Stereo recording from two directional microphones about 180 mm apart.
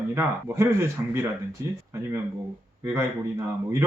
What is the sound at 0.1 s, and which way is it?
A man's voice, 15° right (ahead or behind).